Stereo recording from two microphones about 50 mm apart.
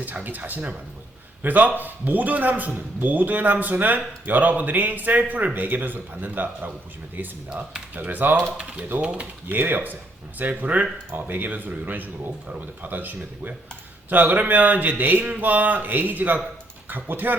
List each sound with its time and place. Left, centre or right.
0.0 s a man's voice: right